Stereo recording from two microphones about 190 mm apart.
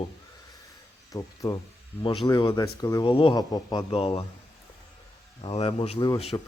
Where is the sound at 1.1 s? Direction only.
15° left (ahead or behind).